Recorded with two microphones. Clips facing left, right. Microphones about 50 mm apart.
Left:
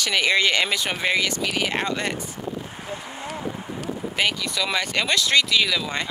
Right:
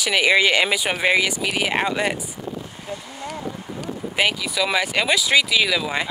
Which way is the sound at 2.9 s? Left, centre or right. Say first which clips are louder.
Right 1 dB; left.